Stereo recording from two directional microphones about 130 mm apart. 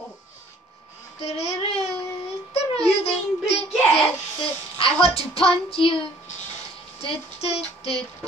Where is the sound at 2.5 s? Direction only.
50° left (ahead or behind).